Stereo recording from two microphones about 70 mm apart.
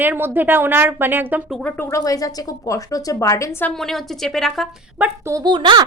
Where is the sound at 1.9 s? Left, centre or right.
Left.